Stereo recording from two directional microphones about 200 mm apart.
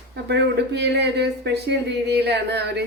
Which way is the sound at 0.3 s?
60° right (ahead or behind).